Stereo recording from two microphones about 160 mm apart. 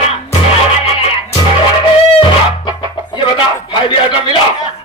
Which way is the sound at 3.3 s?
30° left (ahead or behind).